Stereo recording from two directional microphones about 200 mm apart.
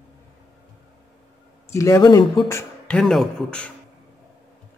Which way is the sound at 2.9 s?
5° left (ahead or behind).